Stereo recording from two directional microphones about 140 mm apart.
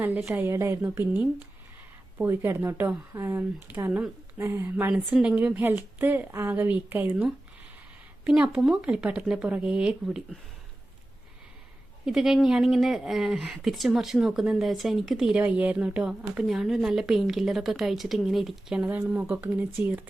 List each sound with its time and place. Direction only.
0.3 s speech: 15° right (ahead or behind)
4.9 s speech: 10° right (ahead or behind)
12.0 s speech: 5° right (ahead or behind)